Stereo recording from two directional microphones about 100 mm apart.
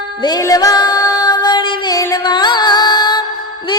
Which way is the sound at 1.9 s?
35° left (ahead or behind).